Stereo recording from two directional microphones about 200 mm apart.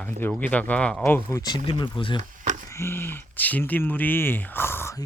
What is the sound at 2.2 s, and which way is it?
Chop, 35° right (ahead or behind).